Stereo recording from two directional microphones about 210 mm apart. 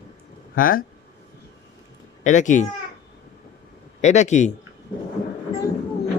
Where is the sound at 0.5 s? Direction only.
40° left (ahead or behind).